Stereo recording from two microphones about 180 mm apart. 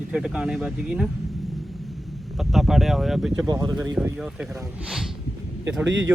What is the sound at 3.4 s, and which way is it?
Speech, 15° right (ahead or behind).